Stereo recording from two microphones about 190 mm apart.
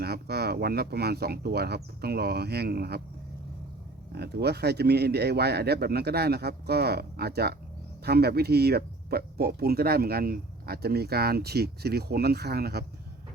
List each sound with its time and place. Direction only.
0.0 s speech: 55° right (ahead or behind)
4.1 s speech: 60° right (ahead or behind)